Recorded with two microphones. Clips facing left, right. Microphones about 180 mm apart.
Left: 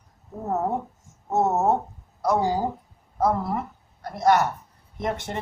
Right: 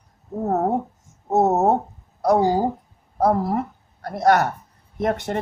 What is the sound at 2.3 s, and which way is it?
Speech, 40° right (ahead or behind).